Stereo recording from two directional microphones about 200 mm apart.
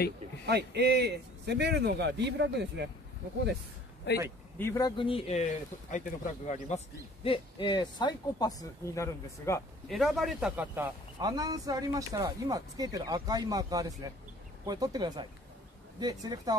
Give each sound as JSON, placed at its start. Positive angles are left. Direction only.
{"t": 0.5, "sound": "a man's voice", "side_deg": -55}
{"t": 4.1, "sound": "speech", "side_deg": 60}
{"t": 4.6, "sound": "speech", "side_deg": 15}
{"t": 7.2, "sound": "speech", "side_deg": 25}
{"t": 9.8, "sound": "speech", "side_deg": 0}
{"t": 11.1, "sound": "speech", "side_deg": -20}